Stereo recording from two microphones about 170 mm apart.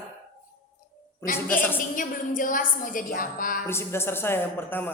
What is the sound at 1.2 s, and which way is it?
A woman's voice, 55° left (ahead or behind).